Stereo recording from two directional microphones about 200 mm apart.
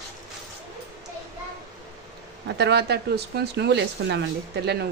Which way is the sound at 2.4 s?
55° right (ahead or behind).